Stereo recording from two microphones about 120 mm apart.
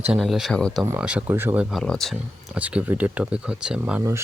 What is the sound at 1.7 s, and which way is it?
Speech, 5° left (ahead or behind).